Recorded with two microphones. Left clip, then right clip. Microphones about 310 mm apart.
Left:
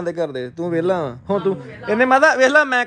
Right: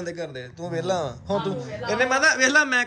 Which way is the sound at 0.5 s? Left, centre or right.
Left.